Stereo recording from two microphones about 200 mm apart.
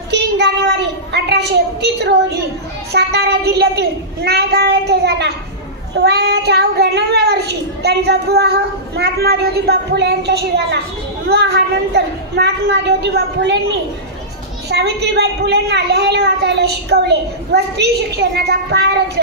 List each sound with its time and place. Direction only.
0.1 s child singing: 60° right (ahead or behind)
2.9 s a child's voice: 55° right (ahead or behind)
14.7 s a child's voice: 55° right (ahead or behind)